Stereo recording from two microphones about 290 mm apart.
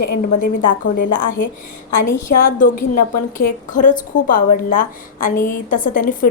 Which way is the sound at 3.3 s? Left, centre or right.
Left.